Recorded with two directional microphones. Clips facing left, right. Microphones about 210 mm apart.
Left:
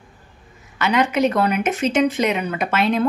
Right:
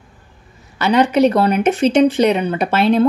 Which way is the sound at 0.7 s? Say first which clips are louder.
Right 5 dB; 35° right (ahead or behind).